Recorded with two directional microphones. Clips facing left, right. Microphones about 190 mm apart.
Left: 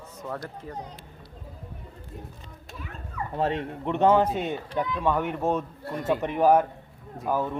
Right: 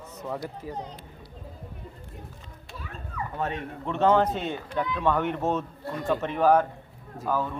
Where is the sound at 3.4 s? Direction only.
30° left (ahead or behind).